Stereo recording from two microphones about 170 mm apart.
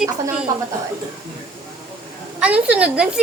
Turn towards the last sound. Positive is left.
turn(degrees=-5)  # may be behind; listen again after turning